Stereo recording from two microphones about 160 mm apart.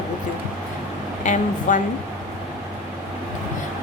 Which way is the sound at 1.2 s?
50° left (ahead or behind).